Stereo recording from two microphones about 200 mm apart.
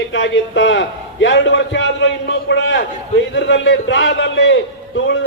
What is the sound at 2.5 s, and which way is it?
A man's voice, 65° left (ahead or behind).